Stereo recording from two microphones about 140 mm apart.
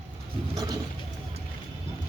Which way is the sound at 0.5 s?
25° right (ahead or behind).